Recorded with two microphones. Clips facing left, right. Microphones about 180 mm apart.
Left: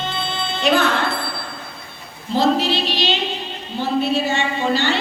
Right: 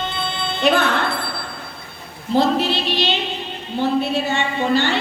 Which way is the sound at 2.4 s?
55° right (ahead or behind).